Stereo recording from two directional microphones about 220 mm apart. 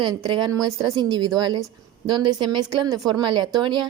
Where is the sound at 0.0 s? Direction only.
20° right (ahead or behind).